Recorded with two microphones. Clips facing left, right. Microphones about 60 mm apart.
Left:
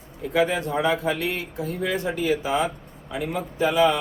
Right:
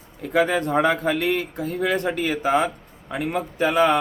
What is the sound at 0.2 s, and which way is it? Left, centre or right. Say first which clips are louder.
Speech: right 2 dB; right.